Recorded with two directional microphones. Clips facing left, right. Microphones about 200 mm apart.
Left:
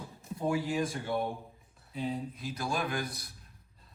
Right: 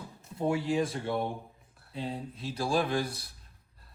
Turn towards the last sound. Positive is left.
turn(degrees=-30)  # may be behind; listen again after turning